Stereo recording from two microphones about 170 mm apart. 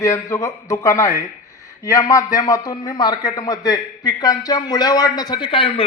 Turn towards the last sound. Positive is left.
turn(degrees=30)  # may be behind; listen again after turning